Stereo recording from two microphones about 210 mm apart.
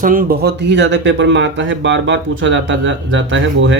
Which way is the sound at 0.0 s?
40° right (ahead or behind).